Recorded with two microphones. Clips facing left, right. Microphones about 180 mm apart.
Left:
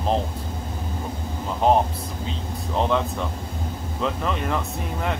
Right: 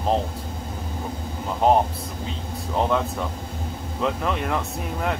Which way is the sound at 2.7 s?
5° right (ahead or behind).